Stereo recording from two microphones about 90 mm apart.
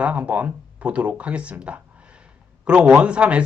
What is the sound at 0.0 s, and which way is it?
Speech, 15° right (ahead or behind).